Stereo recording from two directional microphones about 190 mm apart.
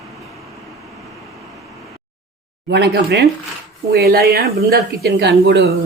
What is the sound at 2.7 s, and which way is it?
A woman's voice, 60° right (ahead or behind).